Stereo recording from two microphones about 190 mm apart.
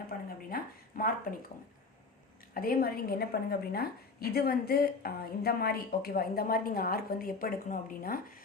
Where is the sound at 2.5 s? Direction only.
50° left (ahead or behind).